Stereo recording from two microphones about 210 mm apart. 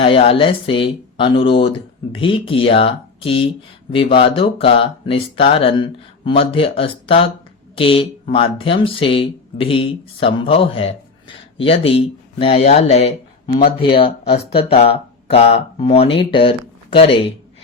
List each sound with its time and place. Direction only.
0.0 s speech: 25° left (ahead or behind)